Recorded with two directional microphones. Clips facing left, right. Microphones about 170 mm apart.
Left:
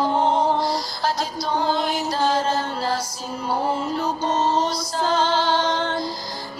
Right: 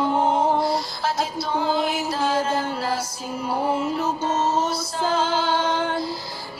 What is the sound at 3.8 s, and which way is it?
Music, 5° right (ahead or behind).